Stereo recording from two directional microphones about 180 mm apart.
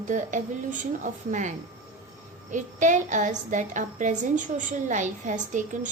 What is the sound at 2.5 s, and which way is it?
A woman's voice, 45° right (ahead or behind).